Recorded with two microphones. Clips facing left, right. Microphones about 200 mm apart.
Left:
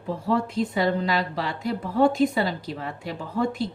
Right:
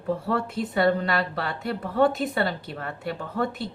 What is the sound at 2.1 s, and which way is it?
Speech, 5° right (ahead or behind).